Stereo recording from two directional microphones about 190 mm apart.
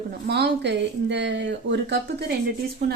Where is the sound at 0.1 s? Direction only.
60° right (ahead or behind).